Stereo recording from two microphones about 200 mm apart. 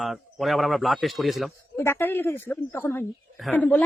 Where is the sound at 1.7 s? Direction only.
10° left (ahead or behind).